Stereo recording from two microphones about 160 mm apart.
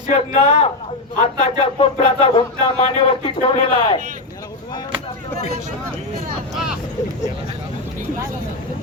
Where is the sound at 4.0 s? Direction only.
55° right (ahead or behind).